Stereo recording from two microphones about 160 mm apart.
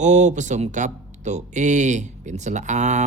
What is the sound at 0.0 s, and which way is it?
Speech, 50° right (ahead or behind).